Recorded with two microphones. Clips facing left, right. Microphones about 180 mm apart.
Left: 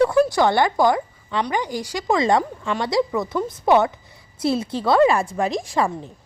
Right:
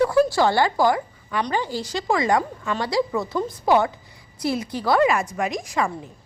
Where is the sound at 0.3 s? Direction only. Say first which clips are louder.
Left 1 dB; 20° left (ahead or behind).